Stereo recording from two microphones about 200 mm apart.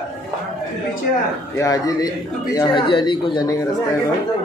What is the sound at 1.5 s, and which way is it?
A man's voice, 15° left (ahead or behind).